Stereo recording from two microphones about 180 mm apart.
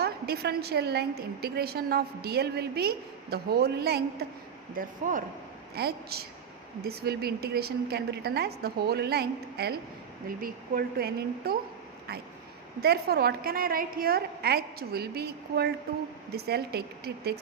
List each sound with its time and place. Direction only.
0.0 s a woman's voice: 65° right (ahead or behind)
4.7 s speech: 50° right (ahead or behind)
5.7 s a woman's voice: 60° right (ahead or behind)
10.2 s a woman's voice: 50° right (ahead or behind)
12.8 s a woman's voice: 60° right (ahead or behind)